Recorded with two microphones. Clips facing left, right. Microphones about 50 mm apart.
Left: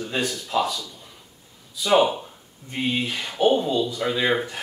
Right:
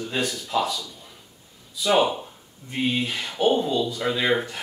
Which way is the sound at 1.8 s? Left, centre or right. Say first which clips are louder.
Left 2 dB; centre.